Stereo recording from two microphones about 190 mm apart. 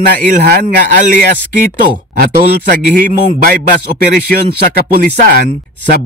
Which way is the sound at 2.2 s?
45° right (ahead or behind).